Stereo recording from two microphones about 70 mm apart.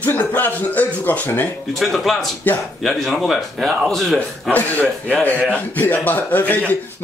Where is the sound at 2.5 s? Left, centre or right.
Left.